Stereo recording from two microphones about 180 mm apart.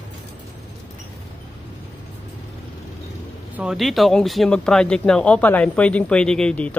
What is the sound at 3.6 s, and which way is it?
Speech, centre (ahead or behind).